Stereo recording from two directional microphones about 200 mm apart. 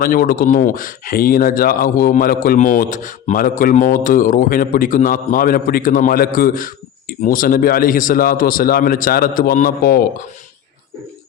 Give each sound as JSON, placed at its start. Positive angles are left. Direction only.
{"t": 0.0, "sound": "speech", "side_deg": 45}